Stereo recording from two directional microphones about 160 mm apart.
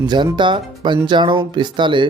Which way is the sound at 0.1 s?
30° right (ahead or behind).